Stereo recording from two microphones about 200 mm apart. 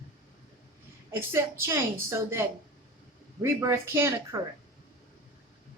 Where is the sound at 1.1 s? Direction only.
10° right (ahead or behind).